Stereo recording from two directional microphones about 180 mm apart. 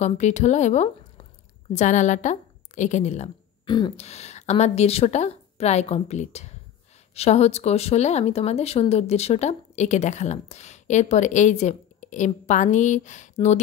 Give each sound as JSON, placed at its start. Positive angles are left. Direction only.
{"t": 0.0, "sound": "a woman's voice", "side_deg": 40}
{"t": 3.6, "sound": "speech", "side_deg": 25}